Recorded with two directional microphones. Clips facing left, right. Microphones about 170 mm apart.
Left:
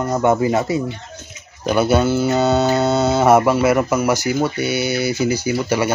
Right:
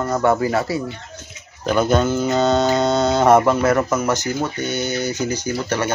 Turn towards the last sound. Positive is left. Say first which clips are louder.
# left 3 dB
turn(degrees=10)  # may be behind; listen again after turning